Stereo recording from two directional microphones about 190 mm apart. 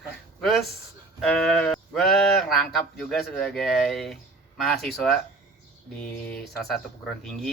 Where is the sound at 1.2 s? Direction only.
Centre (ahead or behind).